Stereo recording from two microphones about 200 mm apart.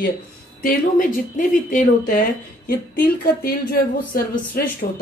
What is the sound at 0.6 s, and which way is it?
A woman's voice, 45° left (ahead or behind).